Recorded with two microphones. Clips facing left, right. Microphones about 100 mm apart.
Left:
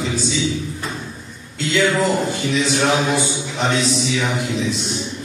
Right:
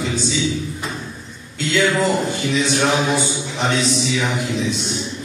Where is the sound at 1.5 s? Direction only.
Centre (ahead or behind).